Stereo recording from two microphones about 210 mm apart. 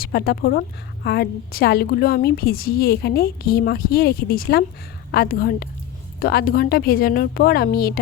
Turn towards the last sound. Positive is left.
turn(degrees=45)  # may be behind; listen again after turning